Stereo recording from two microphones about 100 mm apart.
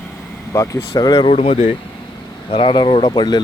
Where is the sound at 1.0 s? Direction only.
45° left (ahead or behind).